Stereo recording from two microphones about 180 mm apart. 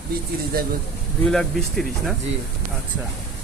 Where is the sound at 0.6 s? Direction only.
55° right (ahead or behind).